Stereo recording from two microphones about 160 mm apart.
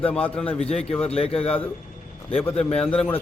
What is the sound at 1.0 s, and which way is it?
Speech, 40° left (ahead or behind).